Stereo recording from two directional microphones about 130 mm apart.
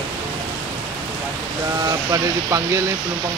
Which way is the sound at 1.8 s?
25° right (ahead or behind).